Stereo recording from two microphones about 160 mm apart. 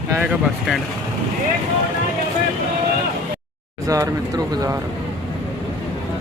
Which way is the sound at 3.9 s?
20° right (ahead or behind).